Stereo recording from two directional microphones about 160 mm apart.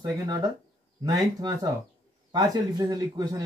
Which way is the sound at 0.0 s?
20° right (ahead or behind).